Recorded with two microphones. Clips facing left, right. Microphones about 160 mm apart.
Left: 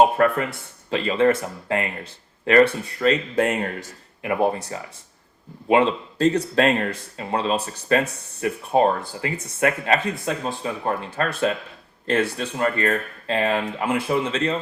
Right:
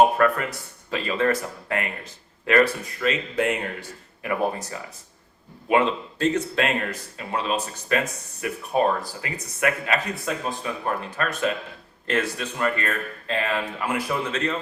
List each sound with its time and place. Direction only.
0.9 s speech: 25° left (ahead or behind); by 3.8 s 40° left (ahead or behind)
4.2 s speech: 30° left (ahead or behind)